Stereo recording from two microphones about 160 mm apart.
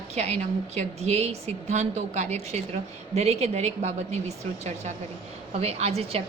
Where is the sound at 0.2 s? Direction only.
45° right (ahead or behind).